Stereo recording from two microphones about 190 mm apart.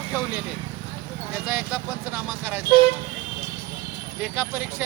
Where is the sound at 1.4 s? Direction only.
10° right (ahead or behind).